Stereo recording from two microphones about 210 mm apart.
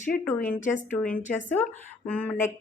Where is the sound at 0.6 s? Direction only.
35° left (ahead or behind).